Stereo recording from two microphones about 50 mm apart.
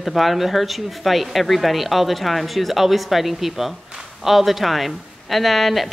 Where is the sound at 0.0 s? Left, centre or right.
Centre.